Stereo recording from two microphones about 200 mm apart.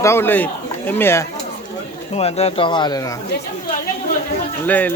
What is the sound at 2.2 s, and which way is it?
Speech, 30° left (ahead or behind).